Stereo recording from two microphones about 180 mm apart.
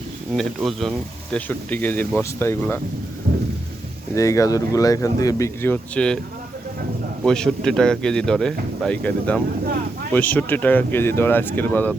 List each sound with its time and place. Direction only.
0.3 s speech: centre (ahead or behind)
3.3 s thunder: 55° right (ahead or behind)
4.1 s speech: 15° left (ahead or behind)
7.3 s speech: 5° left (ahead or behind)